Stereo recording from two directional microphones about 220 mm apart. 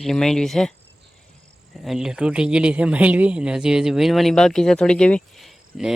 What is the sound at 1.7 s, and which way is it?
Speech, centre (ahead or behind).